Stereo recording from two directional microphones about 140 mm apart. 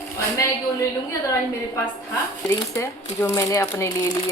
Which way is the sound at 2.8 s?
20° left (ahead or behind).